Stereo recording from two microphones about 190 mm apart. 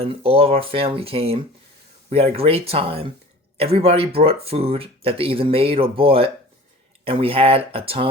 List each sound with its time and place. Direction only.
0.0 s speech: 30° right (ahead or behind)